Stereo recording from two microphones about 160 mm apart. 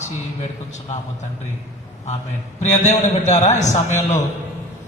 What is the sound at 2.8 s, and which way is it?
Speech, 45° left (ahead or behind).